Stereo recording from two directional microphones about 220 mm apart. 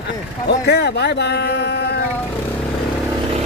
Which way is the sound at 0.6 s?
45° left (ahead or behind).